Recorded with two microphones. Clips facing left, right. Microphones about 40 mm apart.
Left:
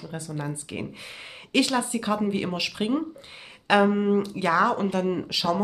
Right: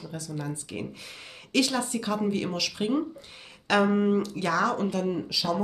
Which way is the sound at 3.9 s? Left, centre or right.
Centre.